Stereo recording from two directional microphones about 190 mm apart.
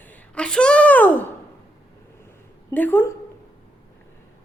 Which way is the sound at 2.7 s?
10° left (ahead or behind).